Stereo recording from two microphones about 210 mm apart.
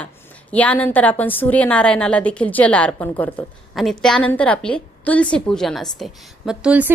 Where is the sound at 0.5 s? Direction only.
5° left (ahead or behind).